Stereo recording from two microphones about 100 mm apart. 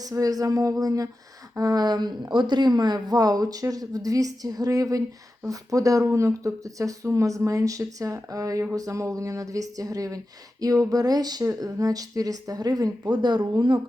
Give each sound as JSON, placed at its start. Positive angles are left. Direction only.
{"t": 0.0, "sound": "speech", "side_deg": -35}